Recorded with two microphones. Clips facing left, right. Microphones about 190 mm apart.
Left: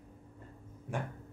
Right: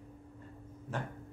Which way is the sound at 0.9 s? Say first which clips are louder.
Left 1 dB; 15° left (ahead or behind).